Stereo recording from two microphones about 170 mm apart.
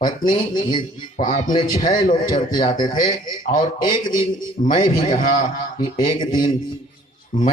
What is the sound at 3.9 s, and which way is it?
Speech, 25° left (ahead or behind).